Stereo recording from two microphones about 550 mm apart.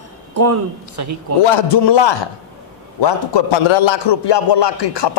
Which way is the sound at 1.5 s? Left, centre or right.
Left.